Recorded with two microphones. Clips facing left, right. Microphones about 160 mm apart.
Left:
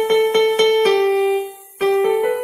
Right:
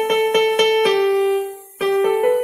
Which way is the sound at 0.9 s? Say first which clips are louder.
Left 1 dB; centre (ahead or behind).